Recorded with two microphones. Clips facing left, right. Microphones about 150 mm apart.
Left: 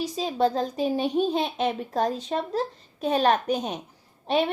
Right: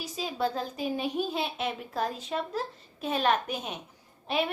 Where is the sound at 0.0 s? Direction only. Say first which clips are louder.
Left 7 dB; 35° left (ahead or behind).